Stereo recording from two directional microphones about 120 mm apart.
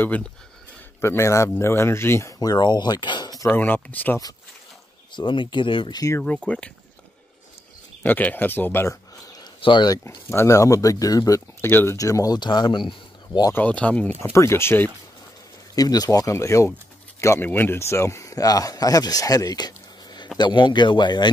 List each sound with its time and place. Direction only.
1.0 s speech: 25° left (ahead or behind)
3.5 s speech: 15° left (ahead or behind)
5.1 s speech: 40° left (ahead or behind)
5.9 s speech: 25° left (ahead or behind)
6.2 s speech: 10° left (ahead or behind)
8.0 s speech: 15° left (ahead or behind)
9.6 s speech: 40° left (ahead or behind)
10.0 s speech: 25° left (ahead or behind)
11.6 s speech: 20° left (ahead or behind); by 13.5 s 40° left (ahead or behind)
13.5 s speech: 15° left (ahead or behind)
14.2 s speech: 25° left (ahead or behind)
15.7 s speech: 30° left (ahead or behind)